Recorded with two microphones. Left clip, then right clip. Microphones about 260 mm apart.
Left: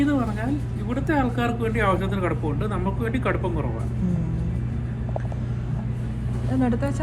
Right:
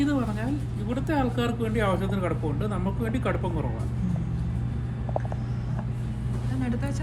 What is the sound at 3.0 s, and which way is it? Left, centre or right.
Speech, right.